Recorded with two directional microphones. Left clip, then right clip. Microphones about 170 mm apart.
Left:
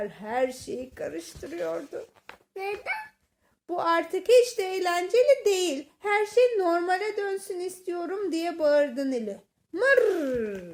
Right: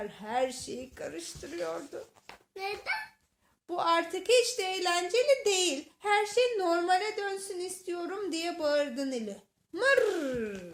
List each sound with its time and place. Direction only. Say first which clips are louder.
0.0 s speech: left 4 dB; 45° left (ahead or behind)